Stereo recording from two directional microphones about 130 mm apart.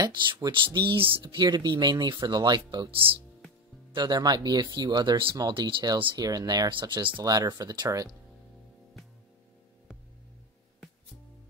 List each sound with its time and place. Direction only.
0.0 s speech: 35° right (ahead or behind)